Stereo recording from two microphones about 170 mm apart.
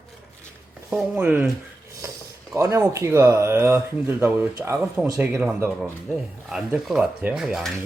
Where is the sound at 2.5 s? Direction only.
15° right (ahead or behind).